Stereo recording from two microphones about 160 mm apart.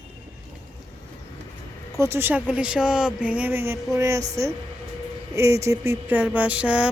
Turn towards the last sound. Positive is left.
turn(degrees=-5)  # may be behind; listen again after turning